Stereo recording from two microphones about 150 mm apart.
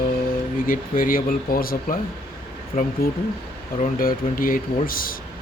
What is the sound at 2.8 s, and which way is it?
Speech, 60° left (ahead or behind).